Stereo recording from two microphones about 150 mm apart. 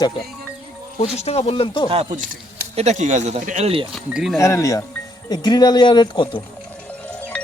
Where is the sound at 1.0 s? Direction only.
45° left (ahead or behind).